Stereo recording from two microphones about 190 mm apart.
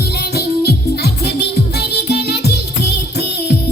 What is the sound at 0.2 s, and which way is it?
Music, 60° left (ahead or behind).